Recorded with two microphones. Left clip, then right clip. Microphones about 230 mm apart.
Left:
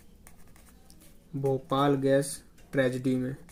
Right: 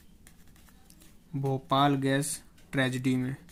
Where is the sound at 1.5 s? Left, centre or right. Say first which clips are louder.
Right 1 dB; right.